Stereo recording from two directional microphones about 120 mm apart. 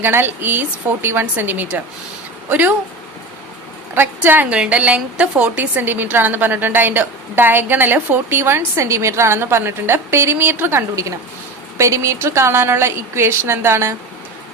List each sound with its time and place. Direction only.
0.0 s a woman's voice: 20° right (ahead or behind)
3.9 s a woman's voice: 15° right (ahead or behind)